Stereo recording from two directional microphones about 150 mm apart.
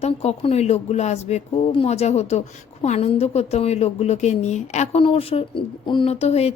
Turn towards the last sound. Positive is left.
turn(degrees=45)  # may be behind; listen again after turning